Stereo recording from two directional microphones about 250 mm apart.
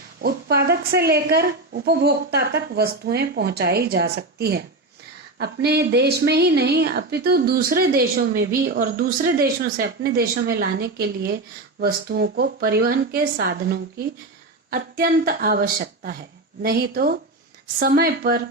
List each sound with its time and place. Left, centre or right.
0.2 s a woman's voice: right
14.7 s a woman's voice: right